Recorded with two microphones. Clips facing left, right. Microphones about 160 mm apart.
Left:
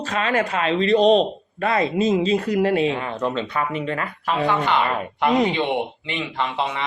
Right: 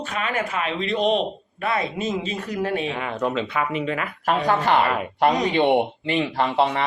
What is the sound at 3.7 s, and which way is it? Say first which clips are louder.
Speech: even; 35° left (ahead or behind).